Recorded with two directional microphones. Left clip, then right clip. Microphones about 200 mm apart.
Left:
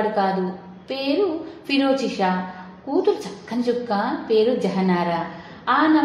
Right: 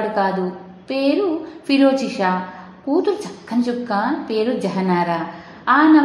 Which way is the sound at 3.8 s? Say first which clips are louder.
Right 2 dB; 35° right (ahead or behind).